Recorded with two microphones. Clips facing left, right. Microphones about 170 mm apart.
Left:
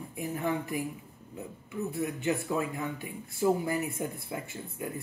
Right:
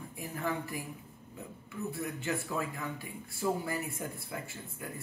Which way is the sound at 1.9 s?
20° left (ahead or behind).